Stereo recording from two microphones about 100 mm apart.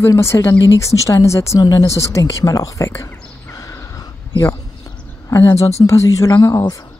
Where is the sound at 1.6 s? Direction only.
40° left (ahead or behind).